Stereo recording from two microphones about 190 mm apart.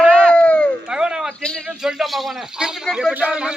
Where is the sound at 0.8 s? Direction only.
5° right (ahead or behind).